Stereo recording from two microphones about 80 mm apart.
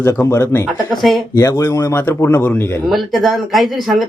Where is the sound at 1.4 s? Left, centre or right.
Left.